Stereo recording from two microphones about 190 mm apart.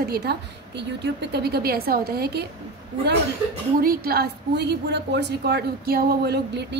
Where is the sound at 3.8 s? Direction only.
50° right (ahead or behind).